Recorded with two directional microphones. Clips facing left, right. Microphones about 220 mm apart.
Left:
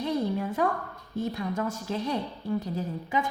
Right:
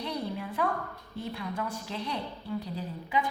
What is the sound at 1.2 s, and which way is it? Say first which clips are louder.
A woman's voice: left 5 dB; 45° left (ahead or behind).